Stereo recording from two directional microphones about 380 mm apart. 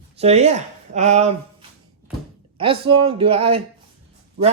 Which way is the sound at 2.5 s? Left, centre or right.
Centre.